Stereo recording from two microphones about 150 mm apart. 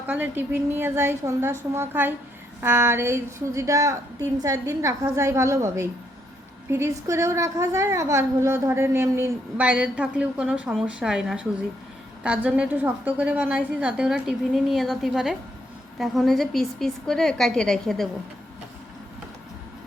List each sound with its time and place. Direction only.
0.1 s a woman's voice: 15° right (ahead or behind); by 18.1 s centre (ahead or behind)